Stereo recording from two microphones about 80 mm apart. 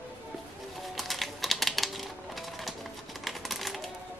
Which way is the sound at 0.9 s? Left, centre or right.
Centre.